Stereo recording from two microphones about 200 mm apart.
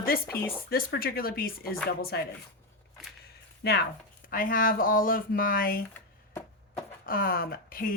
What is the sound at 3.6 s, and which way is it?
Speech, 55° left (ahead or behind).